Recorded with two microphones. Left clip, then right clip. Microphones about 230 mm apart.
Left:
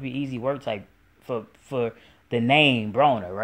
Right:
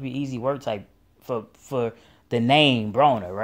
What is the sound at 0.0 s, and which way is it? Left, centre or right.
Speech, right.